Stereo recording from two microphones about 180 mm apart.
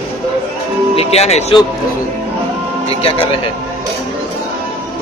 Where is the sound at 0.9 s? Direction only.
35° left (ahead or behind).